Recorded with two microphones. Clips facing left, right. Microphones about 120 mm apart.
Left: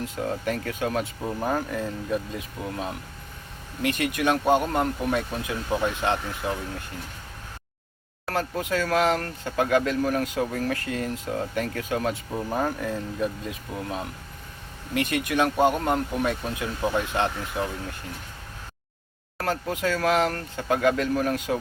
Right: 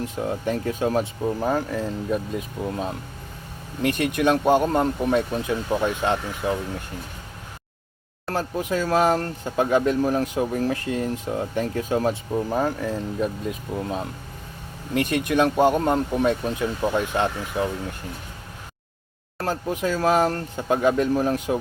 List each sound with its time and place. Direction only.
0.0 s speech: 25° right (ahead or behind)
1.2 s speech: 10° right (ahead or behind)
3.8 s speech: 20° right (ahead or behind)
8.3 s speech: 25° right (ahead or behind)
12.3 s speech: 10° right (ahead or behind)
15.1 s speech: 20° right (ahead or behind)
19.4 s speech: 25° right (ahead or behind)